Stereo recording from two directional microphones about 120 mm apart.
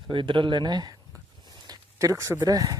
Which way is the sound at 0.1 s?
45° right (ahead or behind).